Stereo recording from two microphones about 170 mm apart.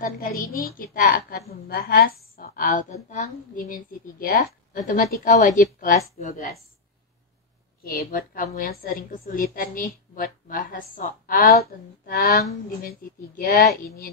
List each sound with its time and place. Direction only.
0.0 s a woman's voice: 60° left (ahead or behind)
7.9 s a woman's voice: 60° left (ahead or behind)
13.4 s a woman's voice: 55° left (ahead or behind)